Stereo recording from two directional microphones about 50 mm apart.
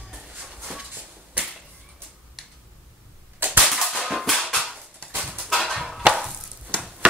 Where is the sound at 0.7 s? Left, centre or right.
Right.